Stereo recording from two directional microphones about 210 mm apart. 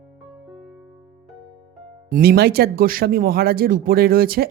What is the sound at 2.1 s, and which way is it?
Speech, 45° right (ahead or behind).